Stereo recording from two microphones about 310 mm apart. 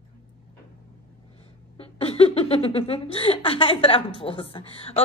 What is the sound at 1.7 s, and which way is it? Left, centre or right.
A woman's voice, centre.